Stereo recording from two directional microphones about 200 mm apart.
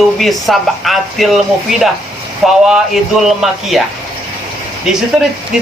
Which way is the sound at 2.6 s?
Centre (ahead or behind).